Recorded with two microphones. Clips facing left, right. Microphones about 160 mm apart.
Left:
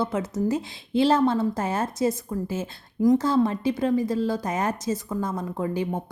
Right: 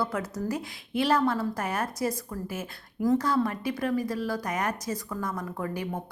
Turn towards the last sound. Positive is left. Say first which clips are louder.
# left 5 dB
turn(degrees=20)  # may be behind; listen again after turning